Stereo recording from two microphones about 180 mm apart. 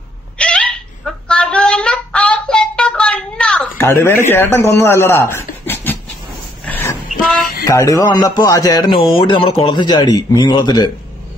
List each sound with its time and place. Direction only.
0.4 s fowl: 5° left (ahead or behind)
4.3 s speech: 15° left (ahead or behind)
6.6 s a sound: 10° left (ahead or behind)
7.6 s speech: 20° left (ahead or behind)